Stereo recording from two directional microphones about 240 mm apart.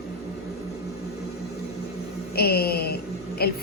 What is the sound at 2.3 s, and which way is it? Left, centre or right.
A woman's voice, left.